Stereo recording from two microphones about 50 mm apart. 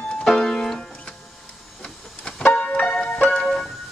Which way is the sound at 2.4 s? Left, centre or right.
Left.